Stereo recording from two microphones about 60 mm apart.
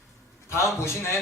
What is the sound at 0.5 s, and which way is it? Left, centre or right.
Speech, left.